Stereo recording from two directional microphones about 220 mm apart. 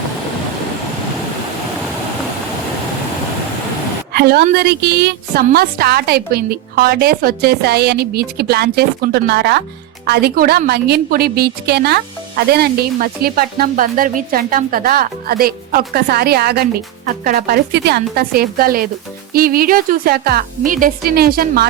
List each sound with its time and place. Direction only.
4.1 s a woman's voice: 45° right (ahead or behind)